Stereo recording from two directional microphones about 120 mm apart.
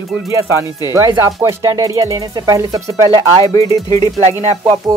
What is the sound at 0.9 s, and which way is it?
Speech, 25° right (ahead or behind).